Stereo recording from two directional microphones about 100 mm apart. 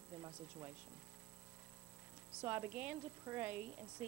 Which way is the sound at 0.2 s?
30° right (ahead or behind).